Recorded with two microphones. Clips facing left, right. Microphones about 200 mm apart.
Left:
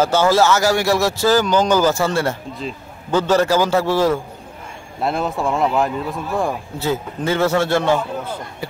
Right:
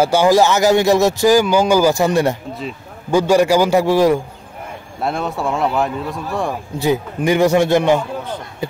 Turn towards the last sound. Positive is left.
turn(degrees=-15)  # may be behind; listen again after turning